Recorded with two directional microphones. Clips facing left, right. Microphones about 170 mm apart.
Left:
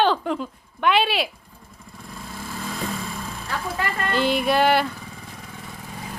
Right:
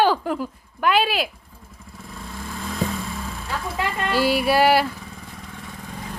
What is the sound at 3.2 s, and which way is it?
Speech, centre (ahead or behind).